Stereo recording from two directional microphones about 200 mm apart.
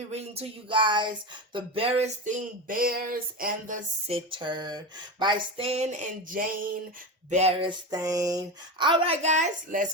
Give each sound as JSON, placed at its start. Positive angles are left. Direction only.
{"t": 0.1, "sound": "speech", "side_deg": -30}
{"t": 4.1, "sound": "speech", "side_deg": -25}
{"t": 7.9, "sound": "speech", "side_deg": -20}
{"t": 9.2, "sound": "speech", "side_deg": -35}